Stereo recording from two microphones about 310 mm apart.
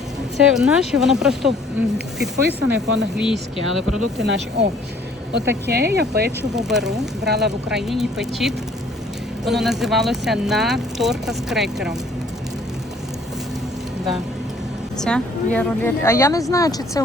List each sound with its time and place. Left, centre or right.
0.3 s speech: centre
2.6 s speech: centre
4.2 s speech: right
6.6 s speech: centre
7.3 s speech: right
7.7 s speech: centre
14.9 s speech: centre